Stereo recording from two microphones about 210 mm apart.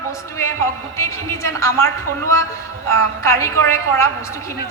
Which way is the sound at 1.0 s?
15° left (ahead or behind).